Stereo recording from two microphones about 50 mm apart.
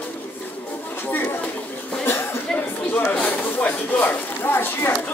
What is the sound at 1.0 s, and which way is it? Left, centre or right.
Chatter, left.